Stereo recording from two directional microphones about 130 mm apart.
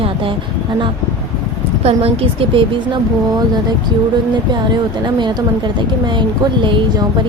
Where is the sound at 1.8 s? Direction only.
50° right (ahead or behind).